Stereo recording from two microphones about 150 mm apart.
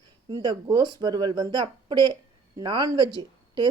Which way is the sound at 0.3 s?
30° right (ahead or behind).